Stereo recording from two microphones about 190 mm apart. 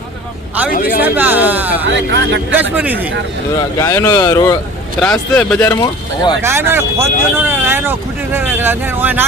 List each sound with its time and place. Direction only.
0.7 s speech: 50° left (ahead or behind)
1.0 s a sound: 10° right (ahead or behind)
1.9 s speech: 70° right (ahead or behind)
2.6 s speech: 10° right (ahead or behind)
3.8 s speech: 15° left (ahead or behind)
4.9 s speech: 5° left (ahead or behind)
5.5 s speech: 15° left (ahead or behind)
6.4 s speech: 10° right (ahead or behind)